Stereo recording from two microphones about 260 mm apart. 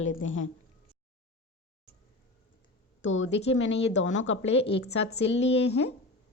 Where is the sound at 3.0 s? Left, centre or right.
Left.